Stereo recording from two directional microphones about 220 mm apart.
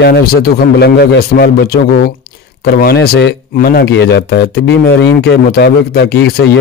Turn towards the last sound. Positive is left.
turn(degrees=45)  # may be behind; listen again after turning